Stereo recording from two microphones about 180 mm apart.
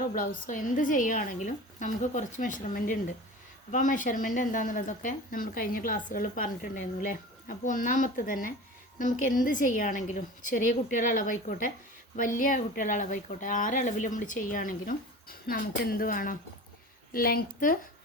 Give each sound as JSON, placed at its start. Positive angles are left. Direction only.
{"t": 0.1, "sound": "speech", "side_deg": 50}